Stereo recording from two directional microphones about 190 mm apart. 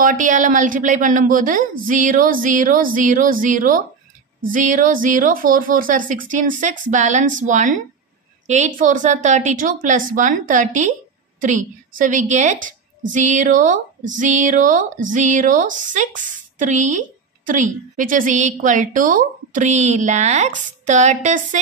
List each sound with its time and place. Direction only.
0.0 s a woman's voice: 40° right (ahead or behind)